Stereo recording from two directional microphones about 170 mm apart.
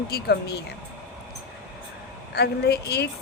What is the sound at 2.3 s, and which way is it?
Speech, 70° left (ahead or behind).